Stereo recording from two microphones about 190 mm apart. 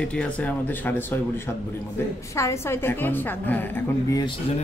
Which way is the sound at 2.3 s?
15° left (ahead or behind).